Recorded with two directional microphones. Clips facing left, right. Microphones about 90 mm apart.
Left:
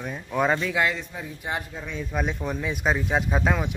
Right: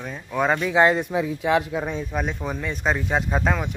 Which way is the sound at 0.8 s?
30° right (ahead or behind).